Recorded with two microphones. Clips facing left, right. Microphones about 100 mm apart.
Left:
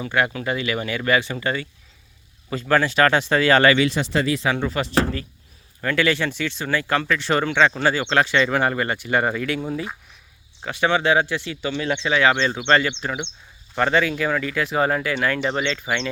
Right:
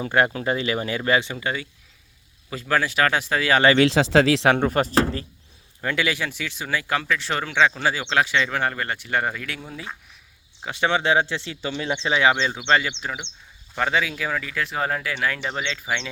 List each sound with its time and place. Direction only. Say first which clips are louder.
0.0 s speech: right 1 dB; 35° right (ahead or behind); by 3.6 s 5° right (ahead or behind)
3.8 s speech: right 4 dB; 90° right
4.5 s speech: right 3 dB; 50° right (ahead or behind)
5.8 s speech: left 4 dB; 15° right (ahead or behind); by 10.0 s 5° left (ahead or behind)
10.7 s speech: left 2 dB; 20° right (ahead or behind)
12.3 s speech: left 2 dB; 10° right (ahead or behind)